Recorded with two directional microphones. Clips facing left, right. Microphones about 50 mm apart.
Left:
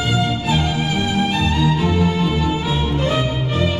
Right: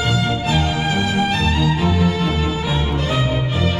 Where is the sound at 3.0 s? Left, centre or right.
Left.